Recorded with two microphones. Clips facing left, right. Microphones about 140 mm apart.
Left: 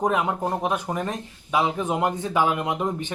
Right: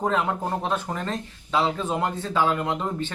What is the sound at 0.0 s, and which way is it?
Speech, 15° left (ahead or behind).